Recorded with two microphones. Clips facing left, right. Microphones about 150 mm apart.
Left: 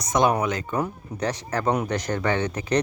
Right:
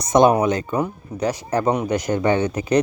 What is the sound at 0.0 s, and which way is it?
Speech, 25° right (ahead or behind).